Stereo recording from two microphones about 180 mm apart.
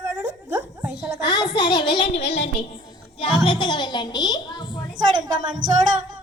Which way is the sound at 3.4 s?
25° left (ahead or behind).